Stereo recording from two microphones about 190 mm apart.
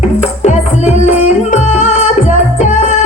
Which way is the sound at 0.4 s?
35° left (ahead or behind).